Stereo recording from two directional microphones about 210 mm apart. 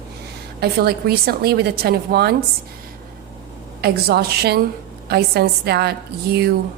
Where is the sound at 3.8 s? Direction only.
50° right (ahead or behind).